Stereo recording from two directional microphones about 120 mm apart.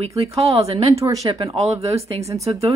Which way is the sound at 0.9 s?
25° right (ahead or behind).